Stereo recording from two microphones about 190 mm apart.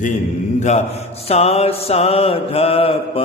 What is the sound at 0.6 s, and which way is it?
Mantra, 35° left (ahead or behind).